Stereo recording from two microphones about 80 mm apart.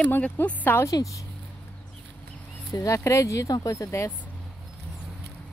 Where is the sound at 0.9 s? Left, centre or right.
Left.